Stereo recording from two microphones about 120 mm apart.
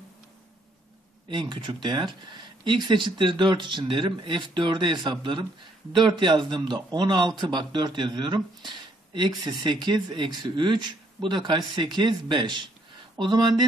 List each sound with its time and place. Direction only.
1.3 s a man's voice: 40° right (ahead or behind)